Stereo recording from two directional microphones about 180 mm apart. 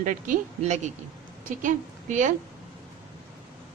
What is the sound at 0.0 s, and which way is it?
A woman's voice, 45° right (ahead or behind).